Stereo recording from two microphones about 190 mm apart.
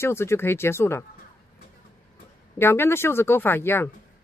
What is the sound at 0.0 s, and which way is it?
Speech, 15° left (ahead or behind).